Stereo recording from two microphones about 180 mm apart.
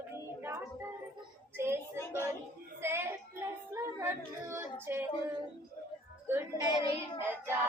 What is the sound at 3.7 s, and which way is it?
Female singing, 15° right (ahead or behind).